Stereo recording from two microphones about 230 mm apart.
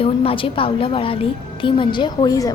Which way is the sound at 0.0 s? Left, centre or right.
Left.